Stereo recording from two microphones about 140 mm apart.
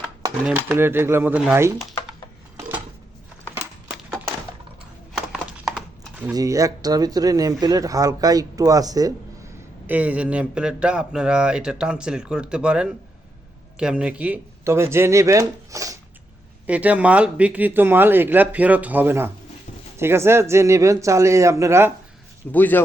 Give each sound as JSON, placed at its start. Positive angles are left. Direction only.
{"t": 0.4, "sound": "speech", "side_deg": -15}
{"t": 5.3, "sound": "a sound", "side_deg": -5}
{"t": 6.3, "sound": "speech", "side_deg": -25}
{"t": 9.8, "sound": "speech", "side_deg": -10}
{"t": 16.6, "sound": "speech", "side_deg": -10}
{"t": 22.5, "sound": "speech", "side_deg": 15}